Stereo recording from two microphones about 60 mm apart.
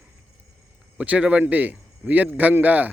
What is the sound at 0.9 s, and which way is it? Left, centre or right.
Speech, right.